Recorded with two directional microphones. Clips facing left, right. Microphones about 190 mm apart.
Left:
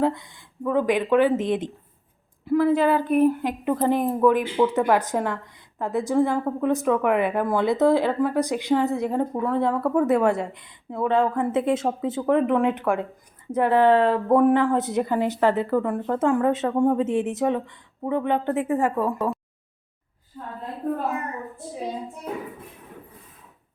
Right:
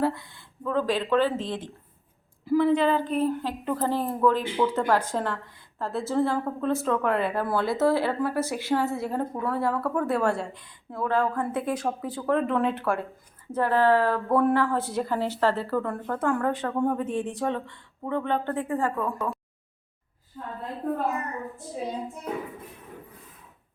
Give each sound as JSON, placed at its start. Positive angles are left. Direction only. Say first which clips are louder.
{"t": 0.0, "sound": "a woman's voice", "louder": "left 3 dB", "side_deg": 15}
{"t": 2.4, "sound": "a woman's voice", "louder": "left 2 dB", "side_deg": 0}